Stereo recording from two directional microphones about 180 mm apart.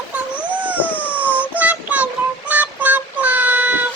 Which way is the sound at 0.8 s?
10° left (ahead or behind).